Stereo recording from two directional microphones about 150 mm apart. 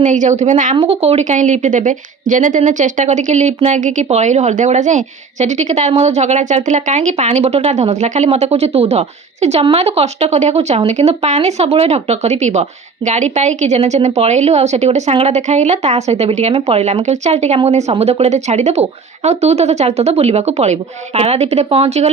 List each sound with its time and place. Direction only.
0.0 s speech: 55° right (ahead or behind)